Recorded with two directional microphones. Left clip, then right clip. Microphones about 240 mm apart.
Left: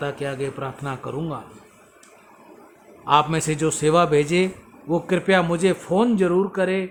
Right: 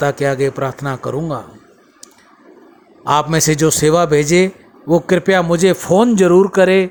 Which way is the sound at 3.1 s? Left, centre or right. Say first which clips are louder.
Right 5 dB; right.